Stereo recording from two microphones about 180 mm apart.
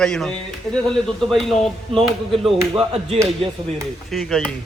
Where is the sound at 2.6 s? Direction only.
20° right (ahead or behind).